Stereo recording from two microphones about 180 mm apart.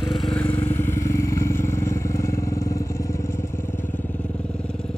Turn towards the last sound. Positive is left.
turn(degrees=15)  # may be behind; listen again after turning